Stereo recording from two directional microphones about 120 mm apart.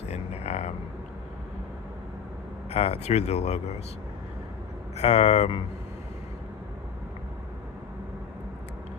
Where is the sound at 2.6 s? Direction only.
60° left (ahead or behind).